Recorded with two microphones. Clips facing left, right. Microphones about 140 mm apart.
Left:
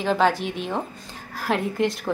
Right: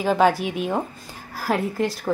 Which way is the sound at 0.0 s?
10° right (ahead or behind).